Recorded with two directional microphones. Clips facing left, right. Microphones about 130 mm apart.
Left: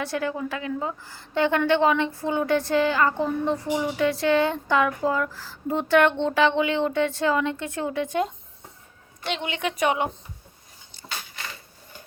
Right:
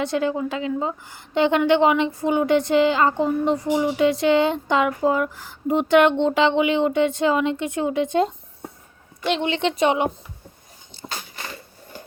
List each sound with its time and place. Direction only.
0.0 s a woman's voice: 20° right (ahead or behind)
9.4 s a woman's voice: 30° right (ahead or behind)
10.9 s a sound: 30° right (ahead or behind)